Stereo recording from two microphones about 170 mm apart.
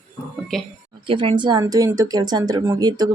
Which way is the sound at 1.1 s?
30° right (ahead or behind).